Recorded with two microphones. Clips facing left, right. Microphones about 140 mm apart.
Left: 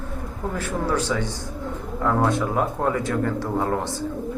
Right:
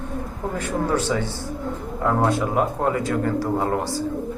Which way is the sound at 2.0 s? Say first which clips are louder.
Right 1 dB; 20° right (ahead or behind).